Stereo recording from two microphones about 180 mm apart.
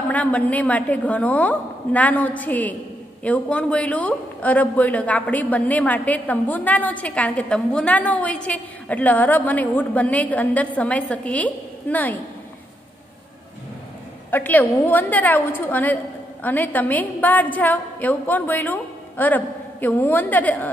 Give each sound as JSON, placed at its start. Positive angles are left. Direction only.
{"t": 0.1, "sound": "a man's voice", "side_deg": 10}
{"t": 14.3, "sound": "a man's voice", "side_deg": 10}